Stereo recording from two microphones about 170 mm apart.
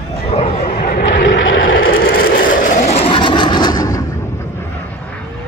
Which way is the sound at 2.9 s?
35° left (ahead or behind).